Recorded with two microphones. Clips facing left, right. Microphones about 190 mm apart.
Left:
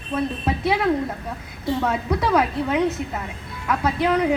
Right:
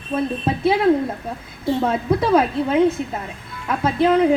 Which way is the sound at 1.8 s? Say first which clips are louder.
Right 4 dB; 25° right (ahead or behind).